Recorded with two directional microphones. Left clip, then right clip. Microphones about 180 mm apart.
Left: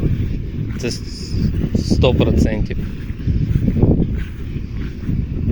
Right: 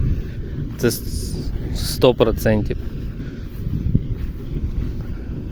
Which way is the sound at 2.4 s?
30° right (ahead or behind).